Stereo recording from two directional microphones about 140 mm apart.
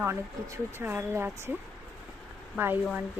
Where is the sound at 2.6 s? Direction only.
15° right (ahead or behind).